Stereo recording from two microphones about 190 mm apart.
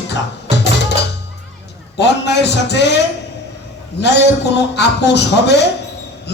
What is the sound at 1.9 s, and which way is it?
Speech, 65° left (ahead or behind).